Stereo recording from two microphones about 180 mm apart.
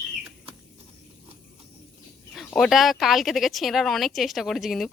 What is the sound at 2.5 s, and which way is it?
Speech, centre (ahead or behind).